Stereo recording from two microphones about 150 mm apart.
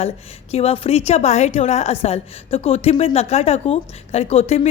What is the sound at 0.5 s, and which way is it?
A woman's voice, 40° left (ahead or behind).